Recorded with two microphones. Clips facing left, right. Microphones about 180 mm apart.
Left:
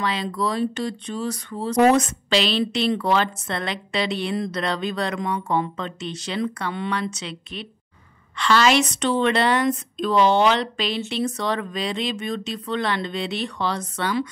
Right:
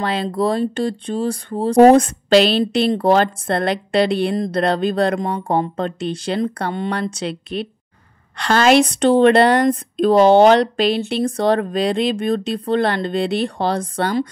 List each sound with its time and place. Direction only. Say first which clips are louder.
0.0 s speech: right 4 dB; 55° right (ahead or behind)
0.7 s speech: right 7 dB; 30° right (ahead or behind)
2.0 s speech: right 8 dB; 55° right (ahead or behind)
7.5 s speech: right 10 dB; 45° right (ahead or behind)
10.6 s speech: right 8 dB; 55° right (ahead or behind)